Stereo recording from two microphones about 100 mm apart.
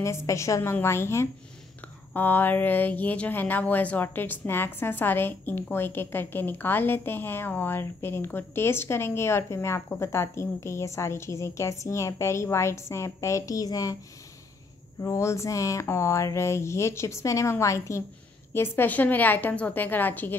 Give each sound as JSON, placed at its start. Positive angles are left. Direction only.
{"t": 0.0, "sound": "speech", "side_deg": 30}
{"t": 15.0, "sound": "a woman's voice", "side_deg": 30}